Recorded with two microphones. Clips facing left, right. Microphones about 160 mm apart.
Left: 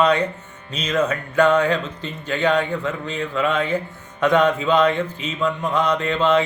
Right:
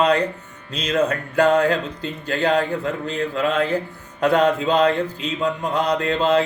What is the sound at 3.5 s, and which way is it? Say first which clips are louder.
Mantra: right 1 dB; 35° right (ahead or behind).